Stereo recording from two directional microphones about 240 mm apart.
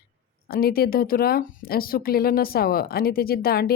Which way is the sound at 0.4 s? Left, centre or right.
Left.